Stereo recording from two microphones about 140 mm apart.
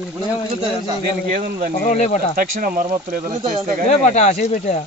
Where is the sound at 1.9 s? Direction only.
55° left (ahead or behind).